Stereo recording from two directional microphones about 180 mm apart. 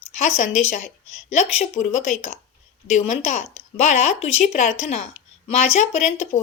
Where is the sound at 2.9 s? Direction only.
40° left (ahead or behind).